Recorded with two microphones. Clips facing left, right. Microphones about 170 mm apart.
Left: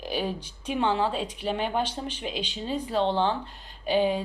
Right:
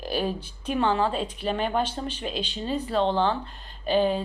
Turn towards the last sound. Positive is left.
turn(degrees=15)  # may be behind; listen again after turning